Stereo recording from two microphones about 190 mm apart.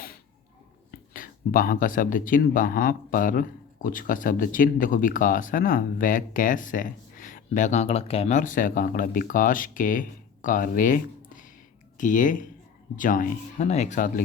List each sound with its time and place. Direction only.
0.9 s speech: 50° left (ahead or behind)